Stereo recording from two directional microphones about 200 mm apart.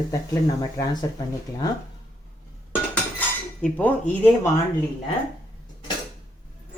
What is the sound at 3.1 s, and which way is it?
Cutlery, 5° left (ahead or behind).